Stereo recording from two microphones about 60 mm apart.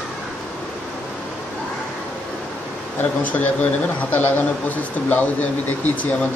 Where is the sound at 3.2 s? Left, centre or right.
Left.